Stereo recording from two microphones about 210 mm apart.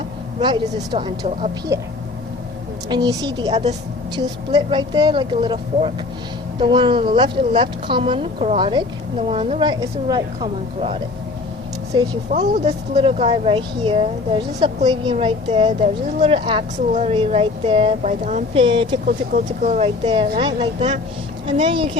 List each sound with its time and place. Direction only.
0.3 s speech: 20° right (ahead or behind)
2.9 s speech: 20° right (ahead or behind)
12.3 s speech: 30° right (ahead or behind)